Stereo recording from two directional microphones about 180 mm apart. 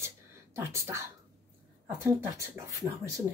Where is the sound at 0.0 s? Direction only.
15° right (ahead or behind).